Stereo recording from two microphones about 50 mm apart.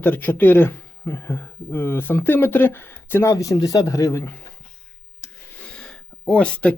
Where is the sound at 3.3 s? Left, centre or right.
Left.